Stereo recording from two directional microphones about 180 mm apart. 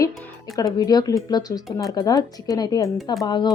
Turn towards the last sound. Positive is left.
turn(degrees=25)  # may be behind; listen again after turning